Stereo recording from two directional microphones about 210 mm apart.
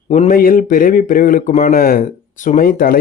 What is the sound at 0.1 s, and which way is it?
A man's voice, 35° left (ahead or behind).